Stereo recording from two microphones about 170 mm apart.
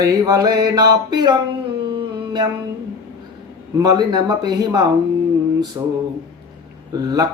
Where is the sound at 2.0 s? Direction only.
25° right (ahead or behind).